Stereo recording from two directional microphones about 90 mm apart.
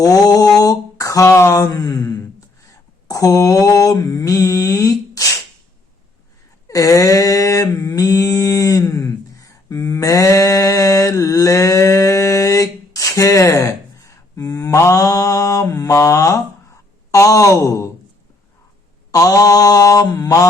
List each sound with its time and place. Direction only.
0.0 s mantra: 45° left (ahead or behind)
6.7 s a sound: 40° left (ahead or behind)
19.1 s mantra: 40° left (ahead or behind)